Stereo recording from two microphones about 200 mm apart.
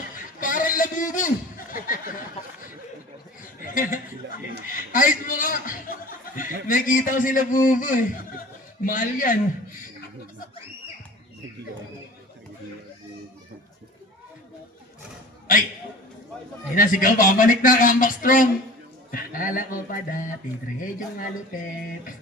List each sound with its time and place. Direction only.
0.3 s a sound: 40° left (ahead or behind)
4.6 s chuckle: 40° left (ahead or behind)
6.7 s a man's voice: 40° left (ahead or behind)
16.7 s a man's voice: 45° left (ahead or behind)